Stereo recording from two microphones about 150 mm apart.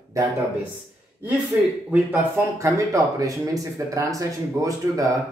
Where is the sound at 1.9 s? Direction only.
10° right (ahead or behind).